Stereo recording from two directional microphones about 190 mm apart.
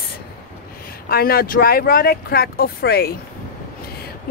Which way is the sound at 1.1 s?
50° left (ahead or behind).